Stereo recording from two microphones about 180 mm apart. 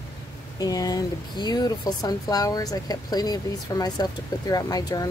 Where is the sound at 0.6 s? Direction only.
20° left (ahead or behind).